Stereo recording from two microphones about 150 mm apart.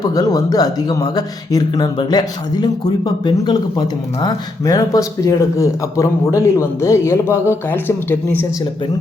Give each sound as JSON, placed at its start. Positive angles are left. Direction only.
{"t": 0.0, "sound": "speech", "side_deg": 25}